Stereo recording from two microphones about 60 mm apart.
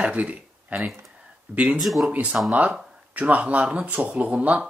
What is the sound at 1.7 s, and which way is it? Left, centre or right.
Speech, centre.